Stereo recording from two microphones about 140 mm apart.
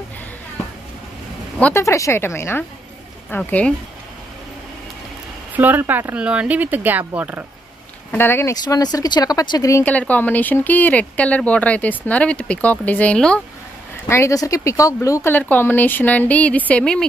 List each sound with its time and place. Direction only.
1.6 s speech: 20° left (ahead or behind)
5.5 s speech: 15° right (ahead or behind)
8.1 s speech: 15° left (ahead or behind)
8.5 s speech: 30° left (ahead or behind); by 13.4 s 10° left (ahead or behind)
14.0 s speech: 20° left (ahead or behind)